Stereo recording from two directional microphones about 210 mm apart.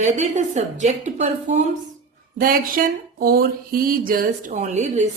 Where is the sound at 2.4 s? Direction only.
45° right (ahead or behind).